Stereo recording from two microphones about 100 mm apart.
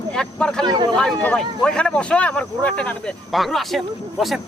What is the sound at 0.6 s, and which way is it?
Speech, 50° right (ahead or behind).